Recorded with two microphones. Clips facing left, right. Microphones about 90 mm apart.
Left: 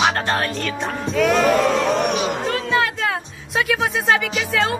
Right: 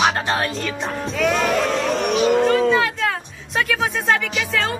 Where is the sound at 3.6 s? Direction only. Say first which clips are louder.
Left 1 dB; 5° left (ahead or behind).